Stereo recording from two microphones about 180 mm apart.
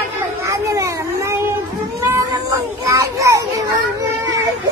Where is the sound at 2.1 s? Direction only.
20° right (ahead or behind).